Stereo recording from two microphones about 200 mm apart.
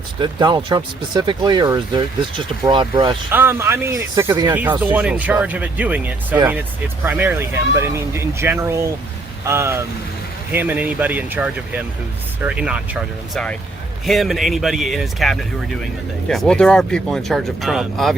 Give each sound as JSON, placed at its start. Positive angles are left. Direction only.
{"t": 0.2, "sound": "speech", "side_deg": -25}
{"t": 3.3, "sound": "speech", "side_deg": -10}